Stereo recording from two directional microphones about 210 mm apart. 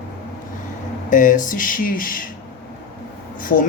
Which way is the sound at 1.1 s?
40° left (ahead or behind).